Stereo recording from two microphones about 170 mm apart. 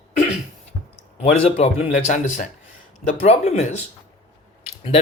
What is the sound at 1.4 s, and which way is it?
Speech, 40° left (ahead or behind).